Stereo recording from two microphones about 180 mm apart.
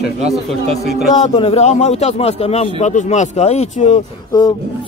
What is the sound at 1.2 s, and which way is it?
Speech, 35° left (ahead or behind).